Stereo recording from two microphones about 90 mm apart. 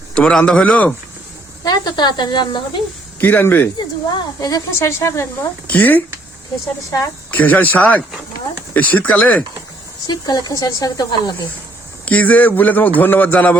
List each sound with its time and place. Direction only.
0.1 s a man's voice: 10° left (ahead or behind)
1.6 s speech: 45° left (ahead or behind)
3.2 s speech: 20° left (ahead or behind)
4.4 s speech: 40° left (ahead or behind)
5.6 s a man's voice: 15° left (ahead or behind)
7.3 s a man's voice: 20° left (ahead or behind)
10.1 s speech: 50° left (ahead or behind)
12.0 s speech: 20° left (ahead or behind)